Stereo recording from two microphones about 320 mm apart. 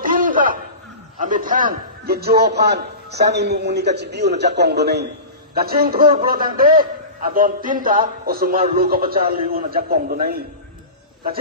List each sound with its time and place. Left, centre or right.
0.0 s chuckle: right
1.2 s a man's voice: right